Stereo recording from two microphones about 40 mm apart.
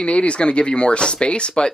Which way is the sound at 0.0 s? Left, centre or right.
Left.